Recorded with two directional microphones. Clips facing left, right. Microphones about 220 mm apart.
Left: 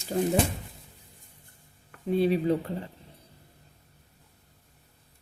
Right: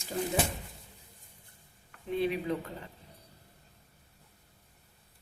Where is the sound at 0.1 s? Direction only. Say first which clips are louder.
Left 7 dB; 40° left (ahead or behind).